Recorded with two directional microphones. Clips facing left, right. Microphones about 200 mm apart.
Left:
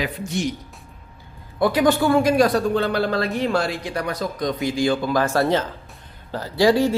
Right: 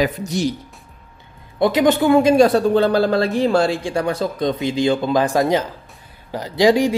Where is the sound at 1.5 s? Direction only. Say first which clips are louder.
Right 3 dB; 20° right (ahead or behind).